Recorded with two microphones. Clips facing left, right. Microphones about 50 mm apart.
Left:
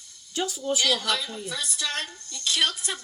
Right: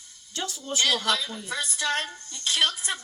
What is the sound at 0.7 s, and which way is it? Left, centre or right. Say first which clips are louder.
Speech: right 2 dB; right.